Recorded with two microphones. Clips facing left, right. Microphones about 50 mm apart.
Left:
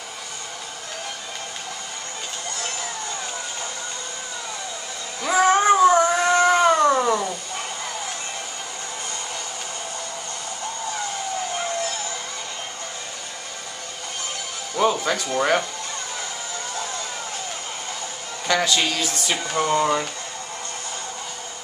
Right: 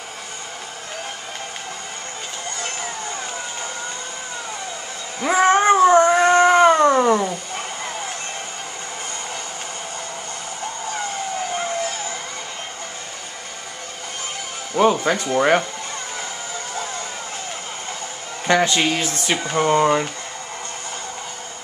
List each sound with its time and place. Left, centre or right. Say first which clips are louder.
2.6 s a sound: right 2 dB; right
5.2 s cat: right 2 dB; right
5.9 s cat: right 4 dB; right; by 8.1 s centre
10.9 s vehicle: right 2 dB; centre
14.8 s speech: right 4 dB; right
18.5 s speech: right 4 dB; right